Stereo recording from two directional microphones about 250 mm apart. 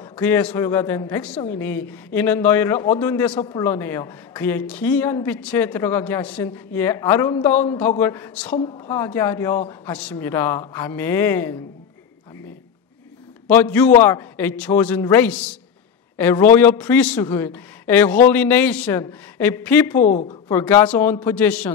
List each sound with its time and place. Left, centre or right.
0.1 s a woman's voice: centre
13.5 s a woman's voice: centre
20.1 s a woman's voice: left
20.4 s a woman's voice: centre